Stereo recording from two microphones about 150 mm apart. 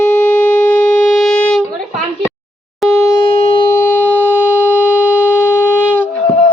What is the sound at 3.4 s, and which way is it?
Shofar, 35° left (ahead or behind).